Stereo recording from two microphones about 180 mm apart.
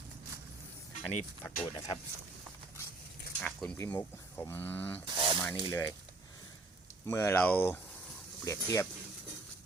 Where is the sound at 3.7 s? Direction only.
10° left (ahead or behind).